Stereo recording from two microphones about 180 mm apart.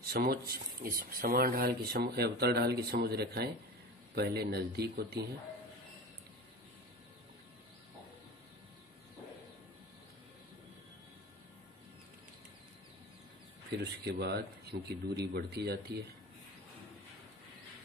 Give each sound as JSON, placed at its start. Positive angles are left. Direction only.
{"t": 0.0, "sound": "speech", "side_deg": -60}
{"t": 13.7, "sound": "speech", "side_deg": -65}